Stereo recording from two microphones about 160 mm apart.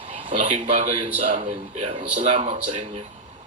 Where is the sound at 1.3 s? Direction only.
35° right (ahead or behind).